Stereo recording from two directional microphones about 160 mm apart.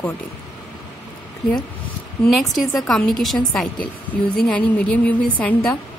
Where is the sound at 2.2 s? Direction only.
Centre (ahead or behind).